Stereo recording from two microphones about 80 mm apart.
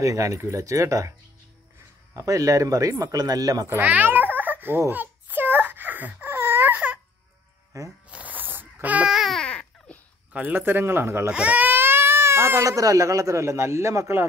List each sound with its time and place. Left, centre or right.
0.0 s speech: right
2.1 s speech: right
3.6 s babbling: right
7.7 s speech: right
8.1 s a sound: centre
9.1 s speech: centre
9.4 s babbling: centre
10.3 s speech: right
11.3 s baby cry: centre; by 12.6 s right
12.6 s a man's voice: right